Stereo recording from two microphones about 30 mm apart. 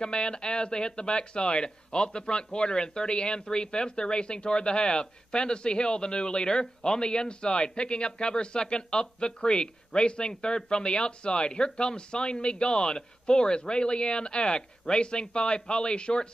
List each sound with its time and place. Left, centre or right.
0.0 s speech: left